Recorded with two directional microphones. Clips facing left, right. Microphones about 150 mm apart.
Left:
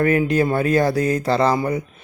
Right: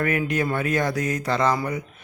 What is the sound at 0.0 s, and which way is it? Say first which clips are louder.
Speech: left 6 dB; 30° left (ahead or behind).